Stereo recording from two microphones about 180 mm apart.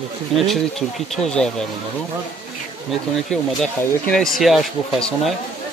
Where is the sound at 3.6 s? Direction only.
5° left (ahead or behind).